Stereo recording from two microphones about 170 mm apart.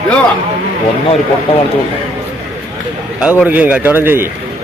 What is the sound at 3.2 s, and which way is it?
Speech, 10° right (ahead or behind).